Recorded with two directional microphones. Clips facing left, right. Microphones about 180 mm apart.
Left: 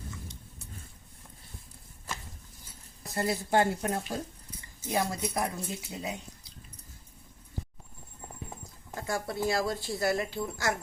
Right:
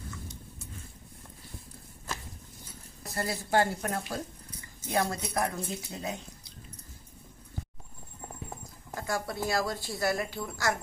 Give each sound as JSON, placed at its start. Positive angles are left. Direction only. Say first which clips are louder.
{"t": 3.2, "sound": "a woman's voice", "louder": "left 1 dB", "side_deg": 25}
{"t": 9.0, "sound": "a woman's voice", "louder": "left 1 dB", "side_deg": 25}